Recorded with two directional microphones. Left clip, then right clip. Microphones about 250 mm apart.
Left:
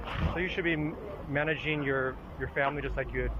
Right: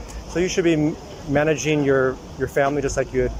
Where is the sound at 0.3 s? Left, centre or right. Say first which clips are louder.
Right 12 dB; right.